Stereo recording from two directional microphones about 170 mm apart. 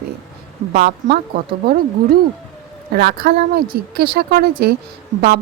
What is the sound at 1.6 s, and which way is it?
Speech, 60° right (ahead or behind).